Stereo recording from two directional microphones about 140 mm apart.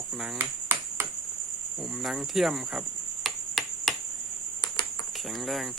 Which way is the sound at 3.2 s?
Centre (ahead or behind).